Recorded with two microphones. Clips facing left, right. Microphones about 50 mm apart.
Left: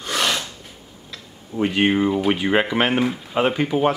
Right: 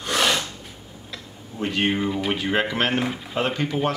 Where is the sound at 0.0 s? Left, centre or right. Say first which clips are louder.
Right 1 dB; centre.